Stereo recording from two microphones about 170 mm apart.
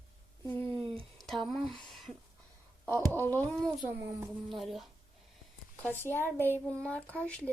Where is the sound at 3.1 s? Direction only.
10° left (ahead or behind).